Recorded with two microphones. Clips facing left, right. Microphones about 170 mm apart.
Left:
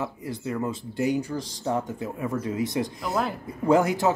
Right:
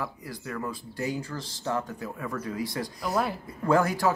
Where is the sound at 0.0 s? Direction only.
25° left (ahead or behind).